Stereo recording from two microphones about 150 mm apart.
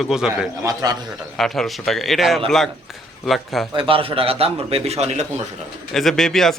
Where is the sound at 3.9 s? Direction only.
40° right (ahead or behind).